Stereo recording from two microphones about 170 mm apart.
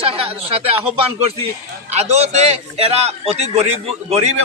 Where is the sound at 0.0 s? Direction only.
35° right (ahead or behind).